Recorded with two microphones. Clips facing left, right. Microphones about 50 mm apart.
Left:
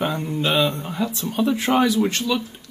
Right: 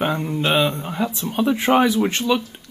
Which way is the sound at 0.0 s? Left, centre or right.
Centre.